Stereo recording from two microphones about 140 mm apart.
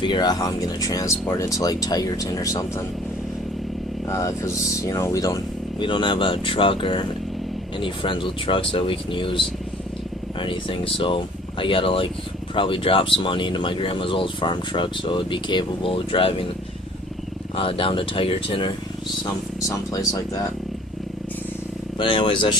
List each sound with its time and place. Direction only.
0.0 s speech: 30° left (ahead or behind)
4.1 s speech: 20° left (ahead or behind)
5.8 s speech: 35° left (ahead or behind)
10.4 s speech: 40° left (ahead or behind)
17.6 s speech: 40° left (ahead or behind)
19.2 s speech: 25° left (ahead or behind)
21.9 s speech: 35° left (ahead or behind)